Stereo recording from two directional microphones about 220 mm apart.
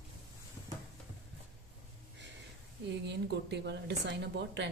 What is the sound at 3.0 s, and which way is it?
Speech, 50° right (ahead or behind).